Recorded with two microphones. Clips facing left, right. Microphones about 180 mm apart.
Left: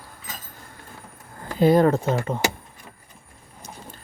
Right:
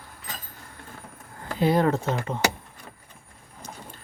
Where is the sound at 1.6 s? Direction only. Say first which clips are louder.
Left 5 dB; 45° left (ahead or behind).